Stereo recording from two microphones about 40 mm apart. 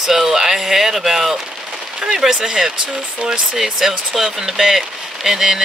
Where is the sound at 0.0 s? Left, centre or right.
Centre.